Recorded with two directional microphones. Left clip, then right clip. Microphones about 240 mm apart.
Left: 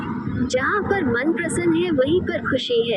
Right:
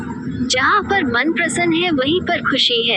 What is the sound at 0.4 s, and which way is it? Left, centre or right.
Speech, centre.